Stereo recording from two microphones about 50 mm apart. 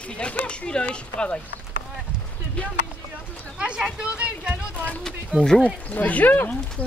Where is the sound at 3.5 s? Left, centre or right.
Centre.